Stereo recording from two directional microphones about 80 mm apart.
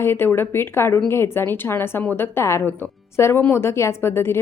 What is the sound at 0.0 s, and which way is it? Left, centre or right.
A woman's voice, left.